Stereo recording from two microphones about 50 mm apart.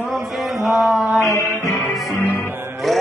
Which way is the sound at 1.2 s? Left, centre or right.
Left.